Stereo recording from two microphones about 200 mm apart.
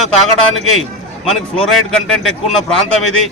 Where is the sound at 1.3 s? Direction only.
Centre (ahead or behind).